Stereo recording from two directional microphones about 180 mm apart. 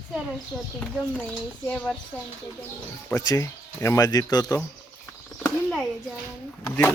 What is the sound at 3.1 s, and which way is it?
Speech, 20° left (ahead or behind).